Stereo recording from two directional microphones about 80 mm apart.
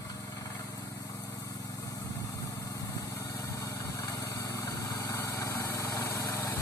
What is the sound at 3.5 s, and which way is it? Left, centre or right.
Vehicle, left.